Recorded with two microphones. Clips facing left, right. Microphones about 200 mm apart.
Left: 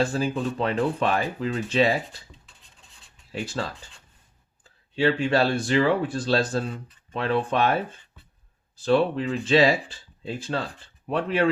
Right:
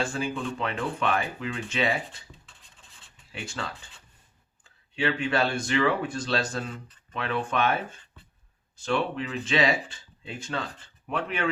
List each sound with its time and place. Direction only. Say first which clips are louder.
0.0 s speech: left 5 dB; 35° left (ahead or behind)
2.5 s a sound: even; centre (ahead or behind)
3.3 s speech: left 6 dB; 35° left (ahead or behind)
4.9 s speech: left 5 dB; 30° left (ahead or behind)